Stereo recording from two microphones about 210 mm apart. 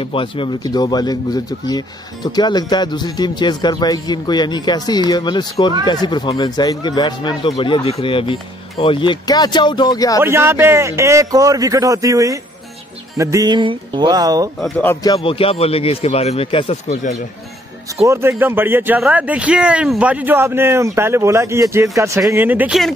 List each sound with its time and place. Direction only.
0.0 s speech: 25° left (ahead or behind)
10.2 s speech: 10° right (ahead or behind)
14.6 s speech: 10° left (ahead or behind)
15.0 s speech: 25° left (ahead or behind)
18.0 s speech: 15° right (ahead or behind)